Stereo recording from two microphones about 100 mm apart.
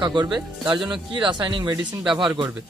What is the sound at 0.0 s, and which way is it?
A man's voice, 45° right (ahead or behind).